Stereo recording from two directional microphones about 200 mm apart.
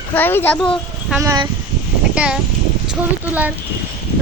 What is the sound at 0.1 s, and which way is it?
Speech, 10° left (ahead or behind).